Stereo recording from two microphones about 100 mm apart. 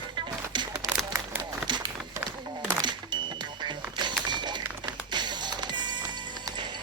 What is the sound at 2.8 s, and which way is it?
Music, 50° right (ahead or behind).